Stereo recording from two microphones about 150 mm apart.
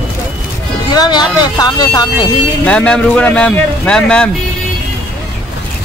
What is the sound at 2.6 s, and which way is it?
Speech, 10° left (ahead or behind).